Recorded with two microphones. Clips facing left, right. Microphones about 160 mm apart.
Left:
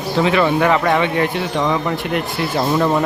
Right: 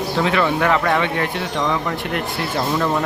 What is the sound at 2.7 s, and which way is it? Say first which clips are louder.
Speech: left 4 dB; 15° left (ahead or behind).